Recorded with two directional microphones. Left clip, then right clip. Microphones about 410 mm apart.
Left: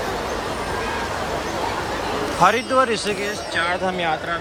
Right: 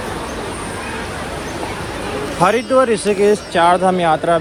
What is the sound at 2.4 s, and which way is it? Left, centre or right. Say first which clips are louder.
Speech: right 4 dB; centre.